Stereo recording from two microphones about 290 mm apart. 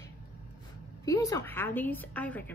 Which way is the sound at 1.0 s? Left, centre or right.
Centre.